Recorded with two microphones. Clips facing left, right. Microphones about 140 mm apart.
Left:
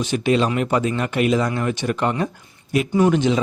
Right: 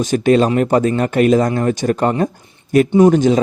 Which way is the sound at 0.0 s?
45° right (ahead or behind).